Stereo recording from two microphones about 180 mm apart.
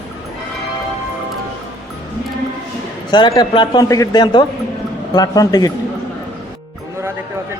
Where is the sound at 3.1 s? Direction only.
25° left (ahead or behind).